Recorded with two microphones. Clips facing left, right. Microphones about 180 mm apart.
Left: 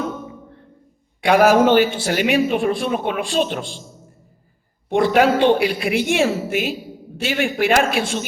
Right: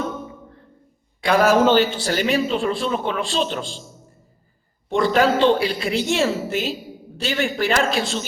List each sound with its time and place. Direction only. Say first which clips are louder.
1.3 s a man's voice: left 2 dB; 60° left (ahead or behind)
4.9 s a man's voice: left 2 dB; 55° left (ahead or behind)